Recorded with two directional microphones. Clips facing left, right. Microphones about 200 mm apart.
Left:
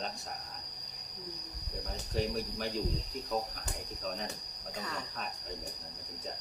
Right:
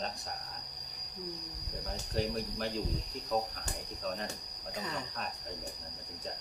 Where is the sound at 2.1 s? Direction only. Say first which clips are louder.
Left 1 dB; centre (ahead or behind).